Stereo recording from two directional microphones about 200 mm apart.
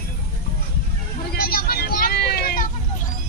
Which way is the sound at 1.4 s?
50° left (ahead or behind).